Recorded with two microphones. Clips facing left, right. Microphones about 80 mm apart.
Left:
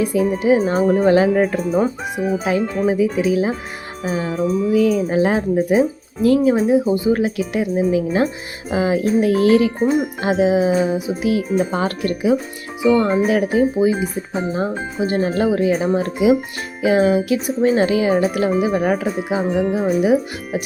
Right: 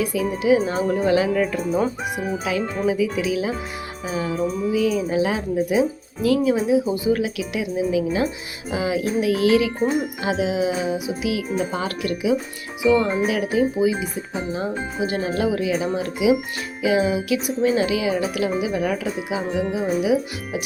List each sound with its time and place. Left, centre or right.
0.0 s speech: left
4.7 s speech: left